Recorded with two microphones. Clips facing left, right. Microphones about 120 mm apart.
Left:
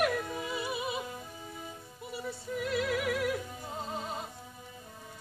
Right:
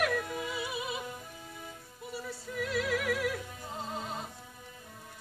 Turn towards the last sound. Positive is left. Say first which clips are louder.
# left 1 dB
turn(degrees=5)  # may be behind; listen again after turning